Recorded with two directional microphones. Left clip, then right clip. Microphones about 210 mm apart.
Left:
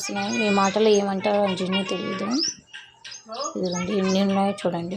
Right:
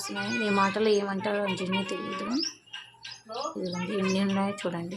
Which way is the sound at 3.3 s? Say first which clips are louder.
Left 6 dB; 25° right (ahead or behind).